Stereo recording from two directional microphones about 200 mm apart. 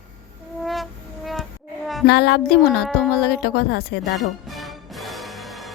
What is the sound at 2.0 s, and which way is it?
Speech, 55° left (ahead or behind).